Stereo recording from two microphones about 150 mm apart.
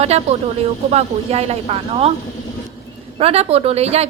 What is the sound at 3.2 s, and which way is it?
Speech, 40° right (ahead or behind).